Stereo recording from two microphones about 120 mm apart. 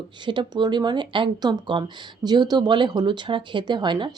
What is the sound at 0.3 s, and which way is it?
Speech, 40° right (ahead or behind).